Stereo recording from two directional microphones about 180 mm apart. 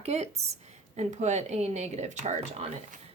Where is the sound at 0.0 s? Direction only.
35° right (ahead or behind).